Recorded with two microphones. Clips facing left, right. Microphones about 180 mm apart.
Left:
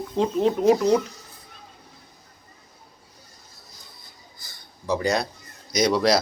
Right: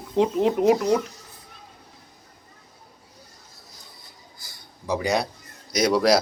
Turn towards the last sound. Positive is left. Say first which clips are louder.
# right 1 dB
turn(degrees=-10)  # may be behind; listen again after turning